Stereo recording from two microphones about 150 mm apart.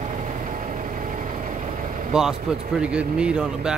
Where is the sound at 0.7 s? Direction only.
60° right (ahead or behind).